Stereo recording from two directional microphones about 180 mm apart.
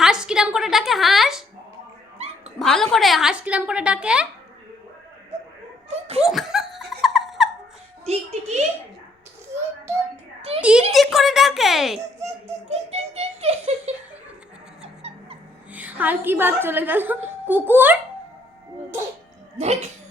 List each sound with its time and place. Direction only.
0.0 s a woman's voice: 5° right (ahead or behind)
2.1 s dog: 35° right (ahead or behind)
2.6 s a woman's voice: centre (ahead or behind)
6.2 s laughter: centre (ahead or behind)
8.0 s a child's voice: 35° right (ahead or behind)
10.6 s a woman's voice: 5° right (ahead or behind)
12.6 s a child's voice: 35° right (ahead or behind)
14.8 s a sound: 35° right (ahead or behind)
15.7 s a woman's voice: 10° right (ahead or behind)
19.5 s a child's voice: 40° right (ahead or behind)